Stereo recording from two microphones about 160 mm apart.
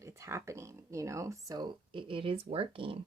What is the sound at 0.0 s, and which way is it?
Speech, 20° right (ahead or behind).